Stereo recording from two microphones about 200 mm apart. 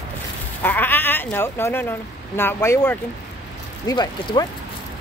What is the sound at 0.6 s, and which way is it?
Speech, 10° left (ahead or behind).